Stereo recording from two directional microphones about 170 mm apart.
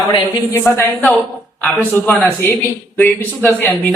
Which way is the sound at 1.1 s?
10° left (ahead or behind).